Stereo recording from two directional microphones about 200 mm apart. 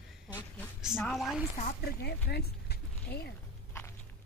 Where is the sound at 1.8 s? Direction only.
55° left (ahead or behind).